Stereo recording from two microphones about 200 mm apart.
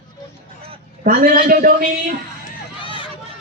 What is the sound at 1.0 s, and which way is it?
A man's voice, 45° right (ahead or behind).